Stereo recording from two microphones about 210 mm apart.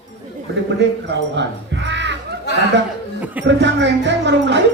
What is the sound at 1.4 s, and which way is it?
Music, 55° right (ahead or behind).